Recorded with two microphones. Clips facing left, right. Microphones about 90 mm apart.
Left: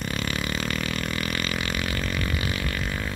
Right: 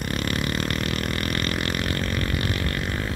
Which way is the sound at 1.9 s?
45° right (ahead or behind).